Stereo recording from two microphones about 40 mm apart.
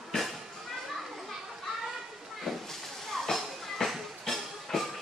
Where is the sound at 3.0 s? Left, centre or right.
Centre.